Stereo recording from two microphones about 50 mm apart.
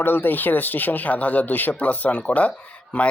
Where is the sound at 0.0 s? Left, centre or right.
Left.